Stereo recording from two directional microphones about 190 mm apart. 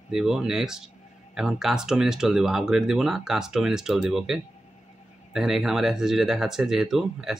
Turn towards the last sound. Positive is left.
turn(degrees=0)  # may be behind; listen again after turning